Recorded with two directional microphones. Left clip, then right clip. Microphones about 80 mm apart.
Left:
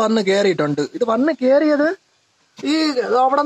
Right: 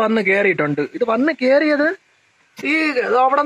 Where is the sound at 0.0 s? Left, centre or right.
Left.